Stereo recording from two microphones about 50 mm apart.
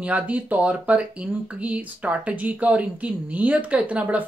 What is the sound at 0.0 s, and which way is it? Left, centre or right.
Speech, right.